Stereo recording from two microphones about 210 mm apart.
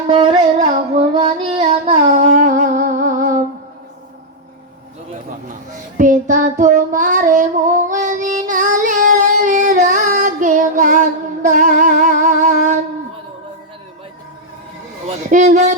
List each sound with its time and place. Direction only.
0.1 s music: 25° right (ahead or behind)
1.9 s humming: 35° right (ahead or behind)
6.0 s child singing: 40° right (ahead or behind)
11.4 s music: 35° right (ahead or behind)
15.0 s speech: 35° right (ahead or behind)